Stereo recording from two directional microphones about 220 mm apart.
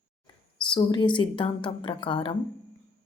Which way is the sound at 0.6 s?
20° left (ahead or behind).